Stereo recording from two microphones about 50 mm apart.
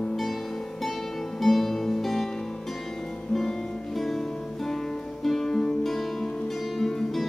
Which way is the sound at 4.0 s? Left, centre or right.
Centre.